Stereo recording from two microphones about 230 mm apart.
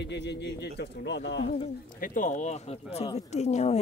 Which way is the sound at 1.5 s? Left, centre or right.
Left.